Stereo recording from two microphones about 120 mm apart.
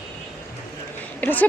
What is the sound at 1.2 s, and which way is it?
Speech, 15° left (ahead or behind).